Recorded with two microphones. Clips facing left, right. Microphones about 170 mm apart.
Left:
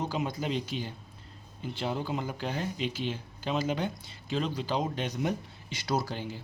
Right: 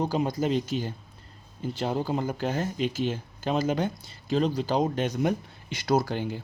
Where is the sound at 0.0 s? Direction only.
35° right (ahead or behind).